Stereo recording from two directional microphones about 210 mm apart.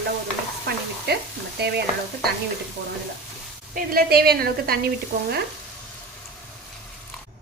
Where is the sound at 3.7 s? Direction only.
45° right (ahead or behind).